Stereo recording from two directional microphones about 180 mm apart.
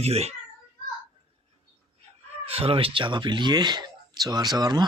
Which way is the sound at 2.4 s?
35° right (ahead or behind).